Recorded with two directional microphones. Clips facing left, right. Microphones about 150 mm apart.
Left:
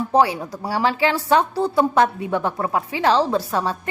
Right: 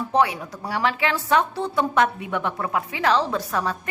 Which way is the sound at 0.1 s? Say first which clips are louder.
Left 3 dB; 30° left (ahead or behind).